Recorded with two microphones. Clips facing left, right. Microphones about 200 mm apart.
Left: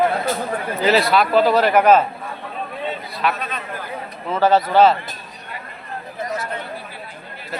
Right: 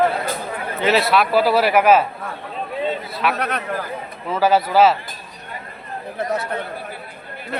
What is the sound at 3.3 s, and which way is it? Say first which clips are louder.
Speech: right 5 dB; 70° right (ahead or behind).